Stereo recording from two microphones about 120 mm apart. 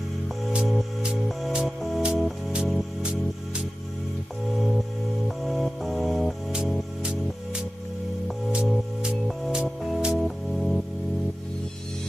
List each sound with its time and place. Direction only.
0.5 s music: 5° right (ahead or behind)